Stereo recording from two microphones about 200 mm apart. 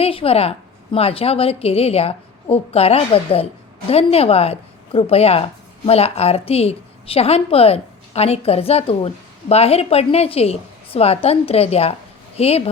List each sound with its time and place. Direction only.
0.0 s a woman's voice: 30° left (ahead or behind)